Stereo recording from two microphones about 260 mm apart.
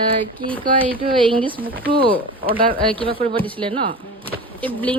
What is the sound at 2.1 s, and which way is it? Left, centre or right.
Speech, centre.